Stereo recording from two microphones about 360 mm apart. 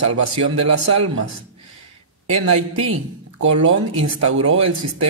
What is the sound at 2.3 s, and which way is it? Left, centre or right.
A man's voice, right.